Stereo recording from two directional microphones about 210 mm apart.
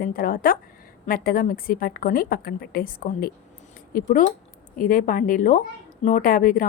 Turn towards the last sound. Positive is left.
turn(degrees=40)  # may be behind; listen again after turning